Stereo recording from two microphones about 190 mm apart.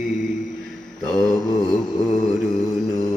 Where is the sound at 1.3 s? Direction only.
20° left (ahead or behind).